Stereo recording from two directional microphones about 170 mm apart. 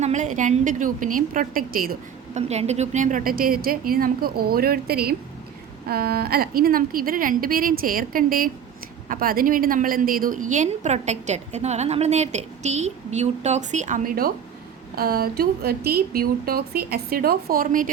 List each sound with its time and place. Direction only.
0.0 s a woman's voice: 45° right (ahead or behind); by 2.0 s 60° right (ahead or behind)
2.3 s a woman's voice: 40° right (ahead or behind)